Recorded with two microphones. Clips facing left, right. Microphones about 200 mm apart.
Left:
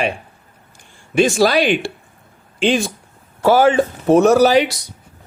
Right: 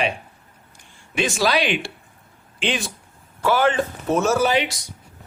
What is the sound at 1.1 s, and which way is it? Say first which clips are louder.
Speech: left 7 dB; 45° left (ahead or behind).